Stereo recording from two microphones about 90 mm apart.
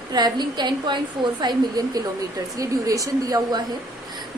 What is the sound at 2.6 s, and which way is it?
A woman's voice, 40° right (ahead or behind).